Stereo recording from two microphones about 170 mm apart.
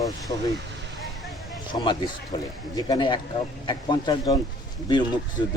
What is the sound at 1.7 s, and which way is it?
Speech, 25° left (ahead or behind).